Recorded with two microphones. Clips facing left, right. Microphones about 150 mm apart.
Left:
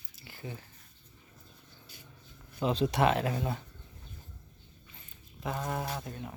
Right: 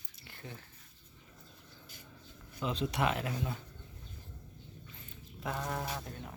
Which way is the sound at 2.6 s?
35° left (ahead or behind).